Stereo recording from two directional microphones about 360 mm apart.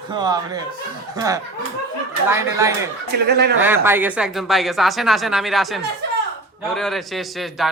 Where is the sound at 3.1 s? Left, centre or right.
Right.